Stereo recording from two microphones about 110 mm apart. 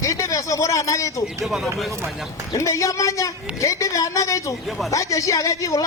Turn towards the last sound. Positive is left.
turn(degrees=30)  # may be behind; listen again after turning